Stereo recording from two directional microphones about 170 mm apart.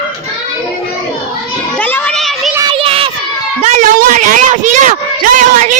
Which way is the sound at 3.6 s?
45° right (ahead or behind).